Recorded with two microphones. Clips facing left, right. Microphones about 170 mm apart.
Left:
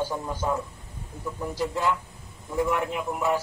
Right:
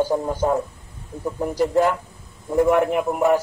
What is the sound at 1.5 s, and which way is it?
Speech, 45° right (ahead or behind).